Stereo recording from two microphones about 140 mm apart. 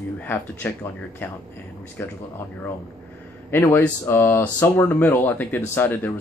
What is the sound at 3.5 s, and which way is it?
Speech, 15° left (ahead or behind).